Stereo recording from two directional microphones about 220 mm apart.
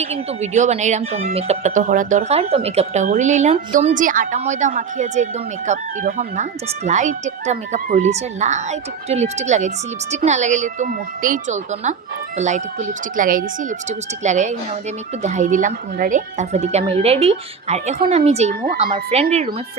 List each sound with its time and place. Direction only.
0.0 s speech: 30° right (ahead or behind)